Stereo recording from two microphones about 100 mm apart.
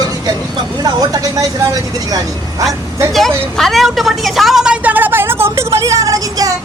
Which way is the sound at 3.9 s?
Centre (ahead or behind).